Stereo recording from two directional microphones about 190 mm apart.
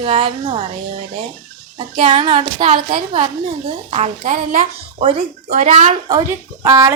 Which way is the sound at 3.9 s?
35° right (ahead or behind).